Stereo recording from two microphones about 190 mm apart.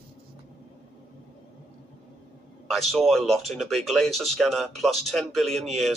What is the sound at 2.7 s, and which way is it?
Speech, centre (ahead or behind).